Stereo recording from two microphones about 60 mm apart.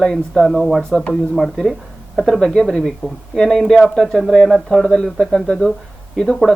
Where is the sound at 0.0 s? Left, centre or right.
Centre.